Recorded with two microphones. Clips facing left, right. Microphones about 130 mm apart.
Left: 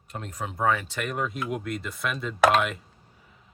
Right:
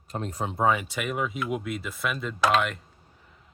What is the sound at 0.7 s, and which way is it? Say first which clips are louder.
Speech: right 1 dB; 15° right (ahead or behind).